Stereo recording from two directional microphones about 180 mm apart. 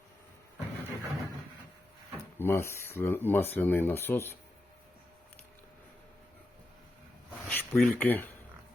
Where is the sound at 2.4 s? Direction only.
15° left (ahead or behind).